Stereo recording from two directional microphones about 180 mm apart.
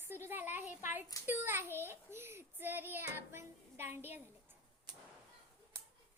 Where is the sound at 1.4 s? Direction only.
10° right (ahead or behind).